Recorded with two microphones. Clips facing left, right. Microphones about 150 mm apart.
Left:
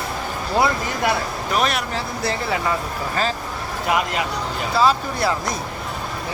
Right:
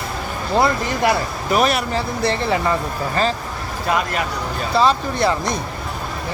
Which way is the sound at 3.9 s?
20° left (ahead or behind).